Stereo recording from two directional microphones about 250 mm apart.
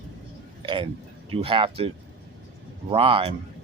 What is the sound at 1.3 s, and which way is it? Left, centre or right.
Speech, right.